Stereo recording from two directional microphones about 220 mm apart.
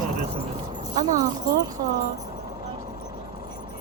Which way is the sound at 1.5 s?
15° right (ahead or behind).